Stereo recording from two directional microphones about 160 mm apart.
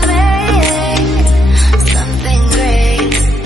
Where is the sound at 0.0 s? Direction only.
Centre (ahead or behind).